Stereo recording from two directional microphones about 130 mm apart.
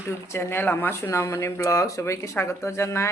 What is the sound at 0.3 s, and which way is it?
Speech, 15° left (ahead or behind).